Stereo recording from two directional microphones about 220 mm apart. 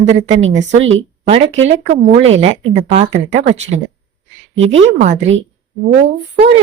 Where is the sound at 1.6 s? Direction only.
30° right (ahead or behind).